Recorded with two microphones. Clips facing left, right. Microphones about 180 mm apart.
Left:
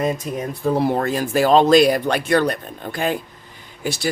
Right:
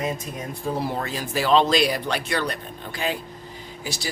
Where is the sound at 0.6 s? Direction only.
60° left (ahead or behind).